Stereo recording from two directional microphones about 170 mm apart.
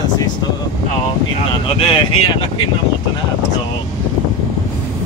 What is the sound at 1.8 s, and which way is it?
Speech, 30° left (ahead or behind).